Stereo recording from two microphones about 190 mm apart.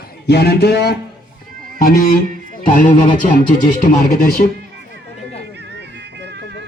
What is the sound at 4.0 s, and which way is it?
Speech, 50° left (ahead or behind).